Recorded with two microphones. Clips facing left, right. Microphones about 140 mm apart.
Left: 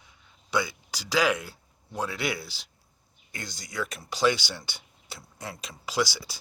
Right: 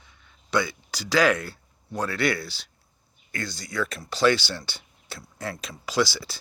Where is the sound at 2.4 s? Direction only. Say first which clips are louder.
Right 5 dB; 70° right (ahead or behind).